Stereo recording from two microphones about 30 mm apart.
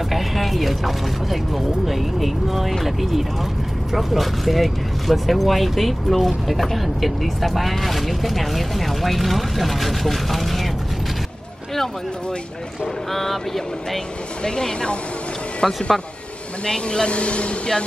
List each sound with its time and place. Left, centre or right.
0.1 s speech: centre
12.8 s speech: centre
14.4 s speech: left
15.6 s speech: centre
16.6 s speech: left
17.1 s speech: left